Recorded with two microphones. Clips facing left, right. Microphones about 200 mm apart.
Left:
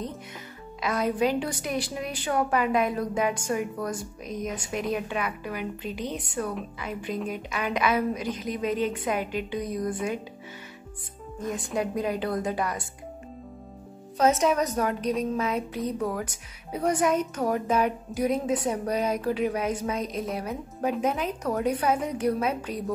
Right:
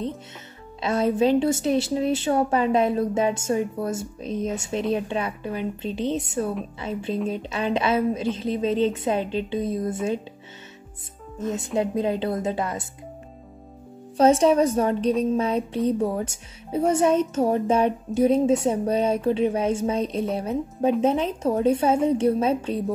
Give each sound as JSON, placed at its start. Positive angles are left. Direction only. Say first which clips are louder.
{"t": 0.7, "sound": "a woman's voice", "louder": "right 4 dB", "side_deg": -25}
{"t": 11.3, "sound": "a woman's voice", "louder": "right 4 dB", "side_deg": -25}
{"t": 14.1, "sound": "a woman's voice", "louder": "right 5 dB", "side_deg": -30}